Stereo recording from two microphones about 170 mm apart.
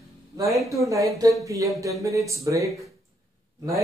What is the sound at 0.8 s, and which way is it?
Speech, 20° right (ahead or behind).